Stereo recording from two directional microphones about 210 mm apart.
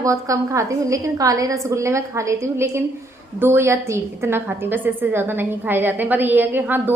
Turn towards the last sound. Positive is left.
turn(degrees=-10)  # may be behind; listen again after turning